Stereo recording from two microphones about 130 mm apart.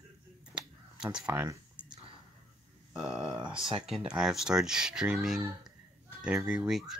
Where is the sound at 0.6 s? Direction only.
5° right (ahead or behind).